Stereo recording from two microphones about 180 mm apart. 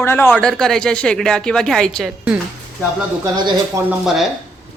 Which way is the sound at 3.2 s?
20° right (ahead or behind).